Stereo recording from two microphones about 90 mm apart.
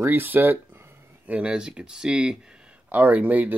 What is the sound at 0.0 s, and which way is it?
Speech, 20° right (ahead or behind).